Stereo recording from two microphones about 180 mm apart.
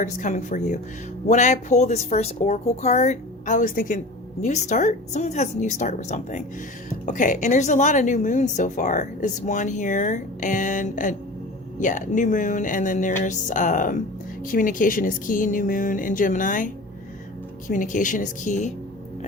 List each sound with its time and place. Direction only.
0.0 s a woman's voice: 45° left (ahead or behind)